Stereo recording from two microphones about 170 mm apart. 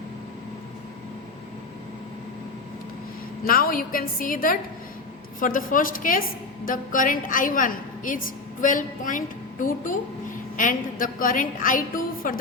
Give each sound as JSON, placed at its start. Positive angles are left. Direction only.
{"t": 3.4, "sound": "a woman's voice", "side_deg": 55}